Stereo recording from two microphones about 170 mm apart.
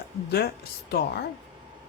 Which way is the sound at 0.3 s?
70° left (ahead or behind).